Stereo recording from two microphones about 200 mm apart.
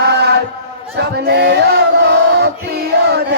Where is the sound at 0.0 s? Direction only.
55° right (ahead or behind).